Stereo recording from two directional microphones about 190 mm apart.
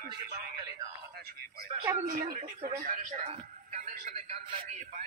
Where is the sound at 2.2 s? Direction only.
45° right (ahead or behind).